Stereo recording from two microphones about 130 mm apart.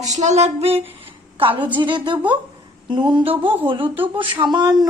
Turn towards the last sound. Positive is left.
turn(degrees=-35)  # may be behind; listen again after turning